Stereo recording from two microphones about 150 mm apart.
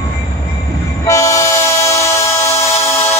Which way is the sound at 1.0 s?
20° left (ahead or behind).